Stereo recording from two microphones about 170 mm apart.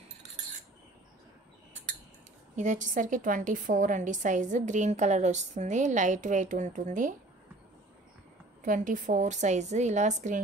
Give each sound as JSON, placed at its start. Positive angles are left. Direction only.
{"t": 2.5, "sound": "a woman's voice", "side_deg": -45}
{"t": 8.6, "sound": "a woman's voice", "side_deg": -50}